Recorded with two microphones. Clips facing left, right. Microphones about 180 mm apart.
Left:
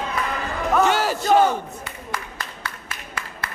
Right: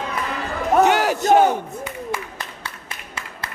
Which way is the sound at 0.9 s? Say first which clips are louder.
Right 3 dB; 15° right (ahead or behind).